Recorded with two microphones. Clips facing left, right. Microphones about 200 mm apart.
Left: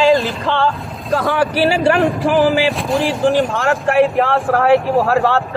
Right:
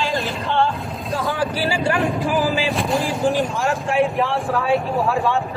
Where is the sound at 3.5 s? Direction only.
65° left (ahead or behind).